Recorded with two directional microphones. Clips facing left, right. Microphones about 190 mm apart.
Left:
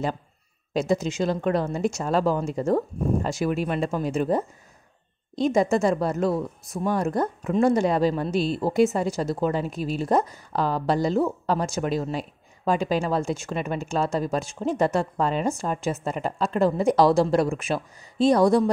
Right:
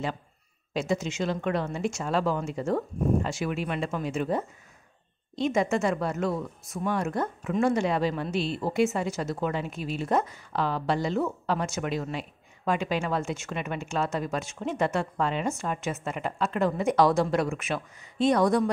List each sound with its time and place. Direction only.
0.7 s speech: 40° left (ahead or behind)